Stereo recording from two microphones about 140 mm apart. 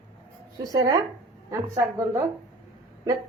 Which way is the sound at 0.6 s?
25° right (ahead or behind).